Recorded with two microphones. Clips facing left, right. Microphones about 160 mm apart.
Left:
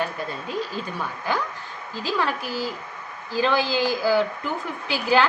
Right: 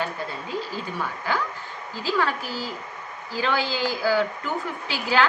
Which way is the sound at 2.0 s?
15° left (ahead or behind).